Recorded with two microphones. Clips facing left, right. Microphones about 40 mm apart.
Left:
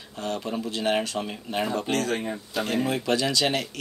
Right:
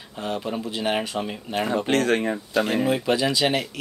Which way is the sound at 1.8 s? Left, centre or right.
Right.